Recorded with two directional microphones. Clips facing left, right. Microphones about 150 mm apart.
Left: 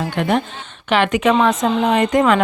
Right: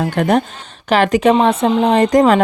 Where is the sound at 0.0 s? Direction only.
40° right (ahead or behind).